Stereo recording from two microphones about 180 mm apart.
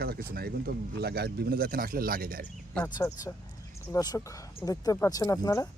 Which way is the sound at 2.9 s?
20° left (ahead or behind).